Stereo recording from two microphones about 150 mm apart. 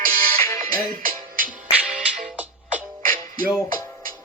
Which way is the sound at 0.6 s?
65° right (ahead or behind).